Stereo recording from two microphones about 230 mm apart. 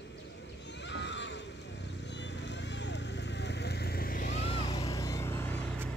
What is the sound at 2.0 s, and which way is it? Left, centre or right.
Vehicle, left.